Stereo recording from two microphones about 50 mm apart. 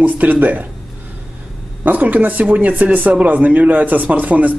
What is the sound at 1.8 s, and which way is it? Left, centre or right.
Speech, right.